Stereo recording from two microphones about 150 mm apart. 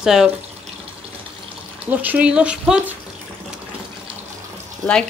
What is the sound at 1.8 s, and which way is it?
Speech, 10° right (ahead or behind).